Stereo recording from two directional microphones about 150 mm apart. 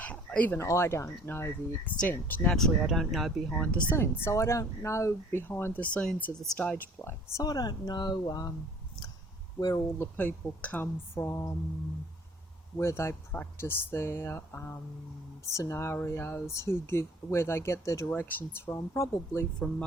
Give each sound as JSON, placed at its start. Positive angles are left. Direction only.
{"t": 0.0, "sound": "speech", "side_deg": 10}
{"t": 3.8, "sound": "speech", "side_deg": 15}
{"t": 7.0, "sound": "speech", "side_deg": 15}
{"t": 9.6, "sound": "speech", "side_deg": 20}
{"t": 10.2, "sound": "speech", "side_deg": 10}
{"t": 12.7, "sound": "speech", "side_deg": 20}